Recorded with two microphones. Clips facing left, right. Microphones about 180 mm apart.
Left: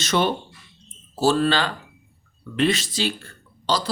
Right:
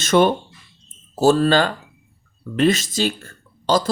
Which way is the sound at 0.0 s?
50° right (ahead or behind).